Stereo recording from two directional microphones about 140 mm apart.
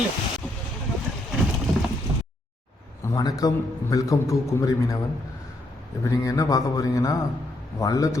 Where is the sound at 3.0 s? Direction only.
25° left (ahead or behind).